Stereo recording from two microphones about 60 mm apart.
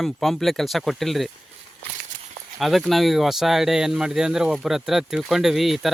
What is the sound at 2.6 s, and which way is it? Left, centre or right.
Speech, centre.